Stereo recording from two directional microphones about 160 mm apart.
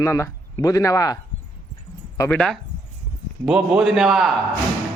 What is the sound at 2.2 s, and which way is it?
A man's voice, 5° left (ahead or behind).